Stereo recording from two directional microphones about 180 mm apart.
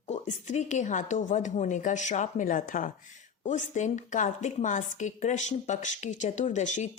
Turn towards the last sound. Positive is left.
turn(degrees=40)  # may be behind; listen again after turning